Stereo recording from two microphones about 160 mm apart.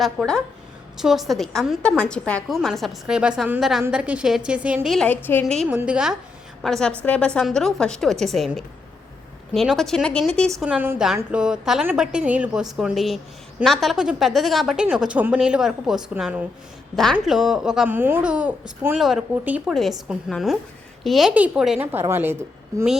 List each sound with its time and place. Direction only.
0.0 s a woman's voice: centre (ahead or behind)
5.0 s a woman's voice: 10° left (ahead or behind)
5.6 s a woman's voice: 5° right (ahead or behind)
10.6 s a woman's voice: 10° right (ahead or behind)